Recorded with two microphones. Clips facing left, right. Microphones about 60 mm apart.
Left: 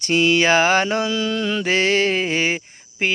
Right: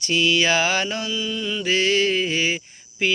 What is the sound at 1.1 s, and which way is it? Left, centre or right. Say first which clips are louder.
Mantra: left 5 dB; left.